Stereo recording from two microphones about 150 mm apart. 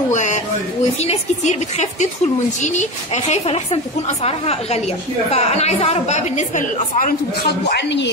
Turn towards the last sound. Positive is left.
turn(degrees=60)  # may be behind; listen again after turning